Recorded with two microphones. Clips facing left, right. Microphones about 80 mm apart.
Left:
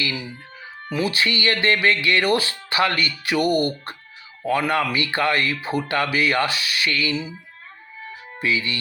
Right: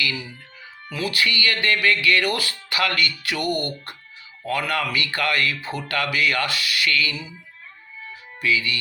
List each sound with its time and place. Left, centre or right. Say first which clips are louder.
0.0 s speech: even; left
4.4 s speech: left 4 dB; left
8.4 s speech: even; left